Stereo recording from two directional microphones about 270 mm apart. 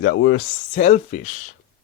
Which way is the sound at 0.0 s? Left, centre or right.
Left.